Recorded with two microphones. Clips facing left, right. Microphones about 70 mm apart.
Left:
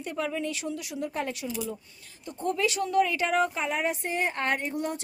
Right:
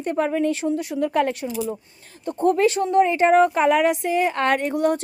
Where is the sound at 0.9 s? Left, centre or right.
Right.